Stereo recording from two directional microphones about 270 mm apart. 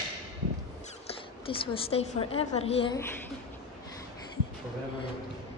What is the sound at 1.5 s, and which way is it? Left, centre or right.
A woman's voice, centre.